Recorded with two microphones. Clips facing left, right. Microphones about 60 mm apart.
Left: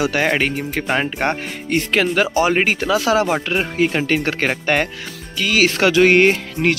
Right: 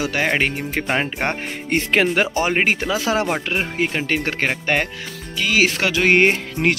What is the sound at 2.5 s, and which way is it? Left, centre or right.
Speech, centre.